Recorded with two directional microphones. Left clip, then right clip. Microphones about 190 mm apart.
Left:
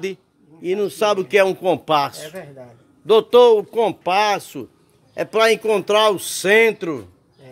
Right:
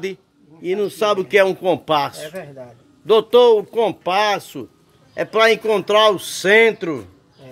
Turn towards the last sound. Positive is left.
turn(degrees=15)  # may be behind; listen again after turning